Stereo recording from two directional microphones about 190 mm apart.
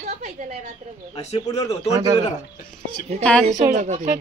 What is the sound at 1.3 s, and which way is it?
Speech, 30° left (ahead or behind).